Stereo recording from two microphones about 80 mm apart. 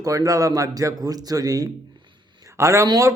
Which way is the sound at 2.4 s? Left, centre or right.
Right.